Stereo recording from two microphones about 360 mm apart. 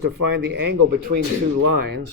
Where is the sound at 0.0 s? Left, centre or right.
Right.